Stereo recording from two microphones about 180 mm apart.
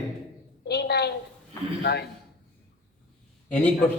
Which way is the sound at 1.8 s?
65° left (ahead or behind).